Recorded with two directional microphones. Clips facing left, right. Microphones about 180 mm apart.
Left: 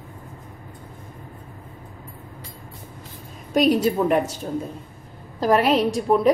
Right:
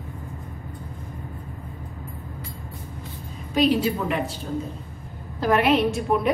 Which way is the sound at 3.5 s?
45° left (ahead or behind).